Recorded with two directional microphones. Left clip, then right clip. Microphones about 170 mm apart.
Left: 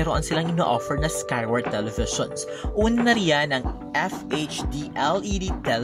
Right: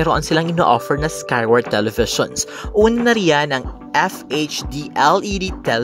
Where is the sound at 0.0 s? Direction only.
40° right (ahead or behind).